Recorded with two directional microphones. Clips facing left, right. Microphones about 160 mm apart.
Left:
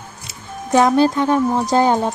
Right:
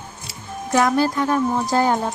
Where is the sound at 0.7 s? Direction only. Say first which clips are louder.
Left 4 dB; 25° left (ahead or behind).